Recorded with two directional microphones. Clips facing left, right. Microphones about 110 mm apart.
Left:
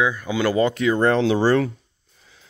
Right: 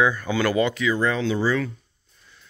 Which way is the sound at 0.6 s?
45° left (ahead or behind).